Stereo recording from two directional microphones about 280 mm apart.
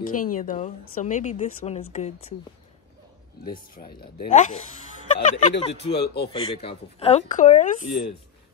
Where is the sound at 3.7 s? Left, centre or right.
Left.